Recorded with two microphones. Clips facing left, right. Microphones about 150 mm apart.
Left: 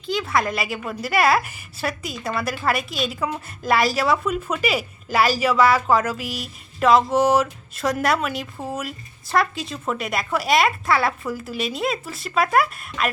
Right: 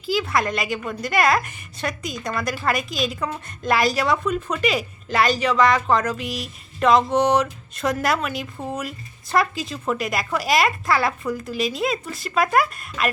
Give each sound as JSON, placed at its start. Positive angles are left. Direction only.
{"t": 0.0, "sound": "a woman's voice", "side_deg": -5}